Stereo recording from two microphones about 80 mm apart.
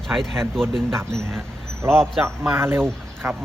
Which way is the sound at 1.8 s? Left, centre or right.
Right.